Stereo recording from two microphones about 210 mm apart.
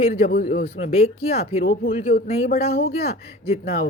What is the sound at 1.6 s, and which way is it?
Speech, 45° left (ahead or behind).